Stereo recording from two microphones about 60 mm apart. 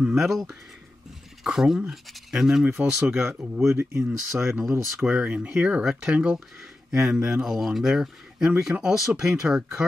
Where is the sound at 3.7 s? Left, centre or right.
Right.